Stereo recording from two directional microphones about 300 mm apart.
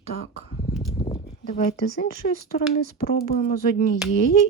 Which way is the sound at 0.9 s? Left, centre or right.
Centre.